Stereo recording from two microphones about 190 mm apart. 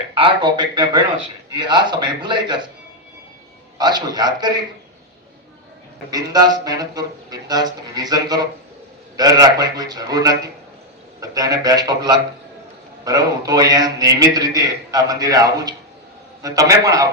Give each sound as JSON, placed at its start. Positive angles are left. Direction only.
{"t": 0.1, "sound": "a man's voice", "side_deg": -25}
{"t": 3.8, "sound": "a man's voice", "side_deg": -20}
{"t": 6.1, "sound": "a man's voice", "side_deg": -20}